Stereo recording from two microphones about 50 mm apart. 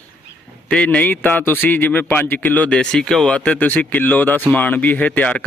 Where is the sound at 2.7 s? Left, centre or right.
Centre.